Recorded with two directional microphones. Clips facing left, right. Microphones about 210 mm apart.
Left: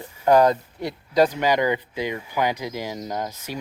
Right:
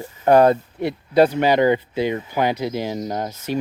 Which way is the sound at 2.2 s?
10° left (ahead or behind).